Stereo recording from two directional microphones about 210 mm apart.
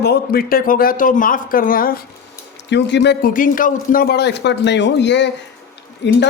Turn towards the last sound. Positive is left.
turn(degrees=55)  # may be behind; listen again after turning